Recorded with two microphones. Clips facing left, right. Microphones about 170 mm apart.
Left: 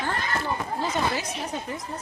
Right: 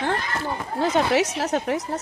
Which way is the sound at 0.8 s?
80° right.